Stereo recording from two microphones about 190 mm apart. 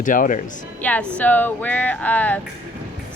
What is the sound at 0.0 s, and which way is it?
Speech, 45° left (ahead or behind).